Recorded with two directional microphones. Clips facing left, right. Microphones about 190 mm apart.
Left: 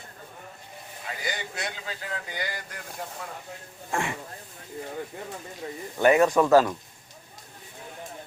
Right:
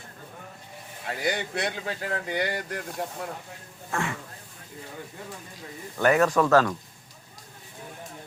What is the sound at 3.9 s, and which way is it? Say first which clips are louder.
Speech: left 1 dB; 15° left (ahead or behind).